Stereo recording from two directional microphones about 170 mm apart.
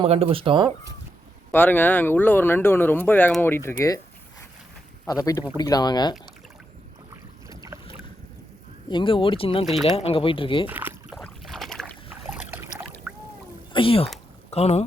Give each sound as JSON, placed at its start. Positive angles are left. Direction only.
{"t": 0.0, "sound": "speech", "side_deg": -35}
{"t": 1.5, "sound": "speech", "side_deg": 10}
{"t": 5.0, "sound": "speech", "side_deg": 20}
{"t": 7.5, "sound": "boat", "side_deg": -20}
{"t": 8.9, "sound": "speech", "side_deg": 30}
{"t": 9.6, "sound": "speech", "side_deg": 0}
{"t": 9.9, "sound": "speech", "side_deg": 35}
{"t": 10.7, "sound": "rowboat", "side_deg": -10}
{"t": 11.2, "sound": "boat", "side_deg": 0}
{"t": 12.3, "sound": "boat", "side_deg": -15}
{"t": 13.1, "sound": "rowboat", "side_deg": -10}
{"t": 13.7, "sound": "speech", "side_deg": 35}